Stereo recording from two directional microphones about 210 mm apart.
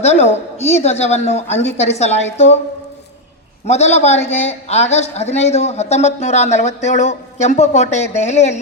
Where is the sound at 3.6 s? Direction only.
30° left (ahead or behind).